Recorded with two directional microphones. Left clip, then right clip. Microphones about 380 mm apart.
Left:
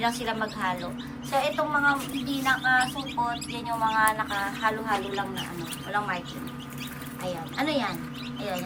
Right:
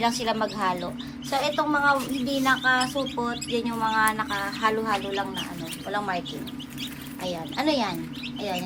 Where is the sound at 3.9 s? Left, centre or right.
Centre.